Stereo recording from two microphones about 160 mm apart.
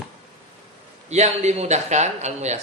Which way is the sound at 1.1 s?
45° right (ahead or behind).